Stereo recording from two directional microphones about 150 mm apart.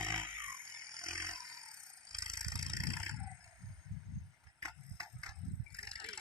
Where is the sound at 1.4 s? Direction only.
20° right (ahead or behind).